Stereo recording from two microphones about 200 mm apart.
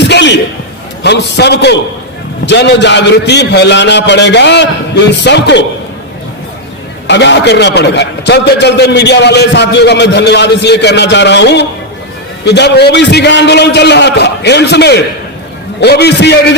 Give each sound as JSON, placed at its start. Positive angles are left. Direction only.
{"t": 0.0, "sound": "a sound", "side_deg": 60}
{"t": 1.0, "sound": "a man's voice", "side_deg": 55}
{"t": 7.1, "sound": "a man's voice", "side_deg": 60}